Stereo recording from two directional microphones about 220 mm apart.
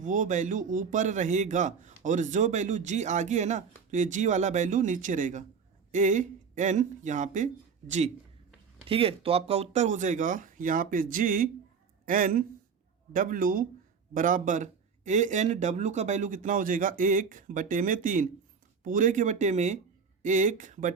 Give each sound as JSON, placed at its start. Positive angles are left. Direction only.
{"t": 0.0, "sound": "a man's voice", "side_deg": -35}